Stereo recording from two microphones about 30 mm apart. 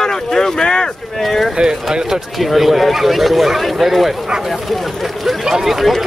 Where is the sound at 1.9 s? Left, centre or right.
Right.